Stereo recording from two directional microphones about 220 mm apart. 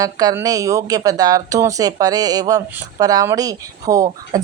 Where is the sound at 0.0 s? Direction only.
15° right (ahead or behind).